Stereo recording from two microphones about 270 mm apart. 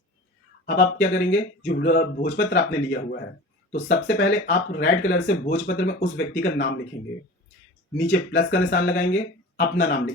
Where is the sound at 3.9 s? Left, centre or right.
Left.